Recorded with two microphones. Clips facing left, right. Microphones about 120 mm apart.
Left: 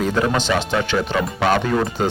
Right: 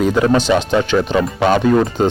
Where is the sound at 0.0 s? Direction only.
15° right (ahead or behind).